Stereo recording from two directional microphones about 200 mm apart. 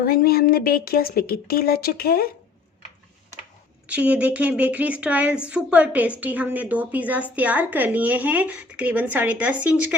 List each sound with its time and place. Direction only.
0.0 s a woman's voice: 50° left (ahead or behind)
3.8 s speech: 5° right (ahead or behind)